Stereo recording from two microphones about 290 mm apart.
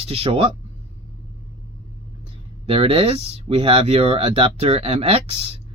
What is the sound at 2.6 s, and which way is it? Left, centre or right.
Speech, centre.